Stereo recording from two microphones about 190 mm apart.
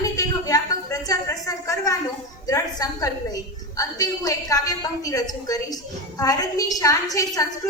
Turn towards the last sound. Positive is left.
turn(degrees=20)  # may be behind; listen again after turning